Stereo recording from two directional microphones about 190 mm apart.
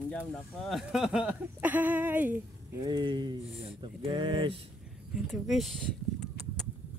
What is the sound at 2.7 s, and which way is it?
Speech, 20° right (ahead or behind).